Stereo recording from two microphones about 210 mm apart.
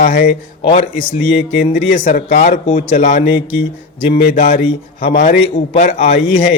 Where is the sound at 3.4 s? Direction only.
65° left (ahead or behind).